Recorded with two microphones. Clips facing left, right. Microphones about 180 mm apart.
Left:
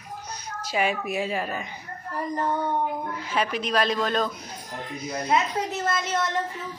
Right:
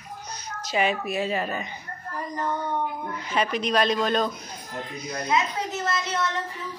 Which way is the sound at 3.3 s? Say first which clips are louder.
Right 1 dB; 5° left (ahead or behind).